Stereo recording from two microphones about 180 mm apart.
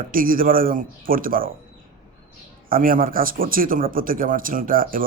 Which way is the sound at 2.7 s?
50° right (ahead or behind).